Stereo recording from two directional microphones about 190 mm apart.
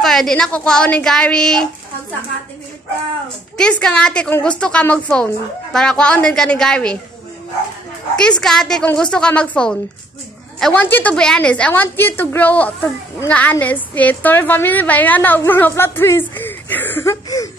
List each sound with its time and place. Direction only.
0.0 s a woman's voice: centre (ahead or behind)
3.5 s a woman's voice: 5° left (ahead or behind)
8.2 s a woman's voice: 5° left (ahead or behind)